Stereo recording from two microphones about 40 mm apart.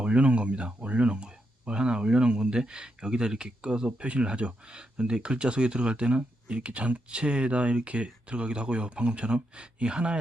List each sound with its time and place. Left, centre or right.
0.0 s speech: right